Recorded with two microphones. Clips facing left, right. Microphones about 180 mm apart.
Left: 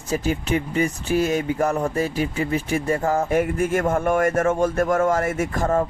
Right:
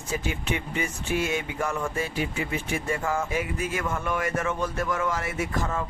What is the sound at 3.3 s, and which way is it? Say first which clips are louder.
Speech: left 9 dB; 50° left (ahead or behind).